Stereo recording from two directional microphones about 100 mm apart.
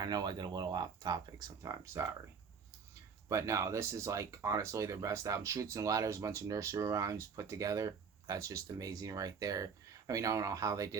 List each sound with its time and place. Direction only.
0.0 s speech: 40° right (ahead or behind)
3.2 s speech: 30° right (ahead or behind)